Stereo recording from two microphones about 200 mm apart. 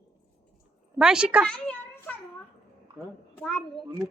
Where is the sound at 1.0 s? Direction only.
5° right (ahead or behind).